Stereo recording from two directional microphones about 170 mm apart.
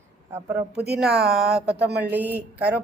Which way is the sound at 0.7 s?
70° right (ahead or behind).